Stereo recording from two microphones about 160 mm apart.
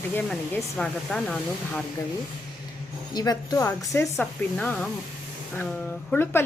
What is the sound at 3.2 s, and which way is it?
Speech, 25° left (ahead or behind).